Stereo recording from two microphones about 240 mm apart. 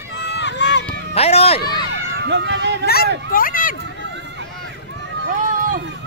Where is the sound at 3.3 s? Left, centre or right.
Left.